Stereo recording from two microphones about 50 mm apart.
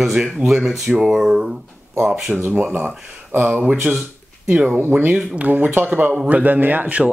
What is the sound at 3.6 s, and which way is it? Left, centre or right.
Speech, right.